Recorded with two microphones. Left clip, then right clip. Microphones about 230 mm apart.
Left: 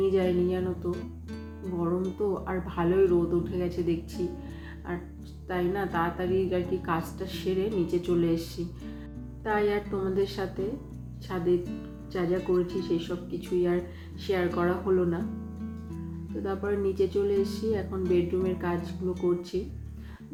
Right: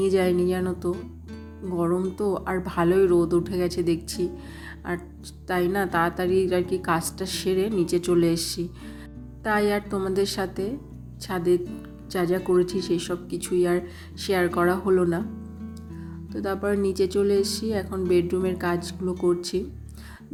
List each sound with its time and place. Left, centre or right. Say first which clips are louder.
0.0 s speech: right 4 dB; right
0.9 s music: right 1 dB; centre
1.7 s speech: right 5 dB; right
16.4 s speech: right 4 dB; right